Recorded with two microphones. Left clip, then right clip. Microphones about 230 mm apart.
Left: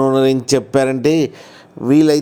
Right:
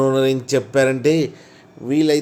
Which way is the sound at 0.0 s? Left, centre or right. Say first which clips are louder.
Left 3 dB; left.